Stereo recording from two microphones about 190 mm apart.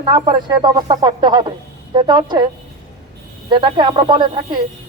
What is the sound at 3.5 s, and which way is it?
Speech, 25° right (ahead or behind).